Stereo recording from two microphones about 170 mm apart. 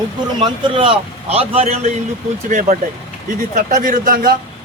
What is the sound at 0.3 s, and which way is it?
A man's voice, 30° right (ahead or behind).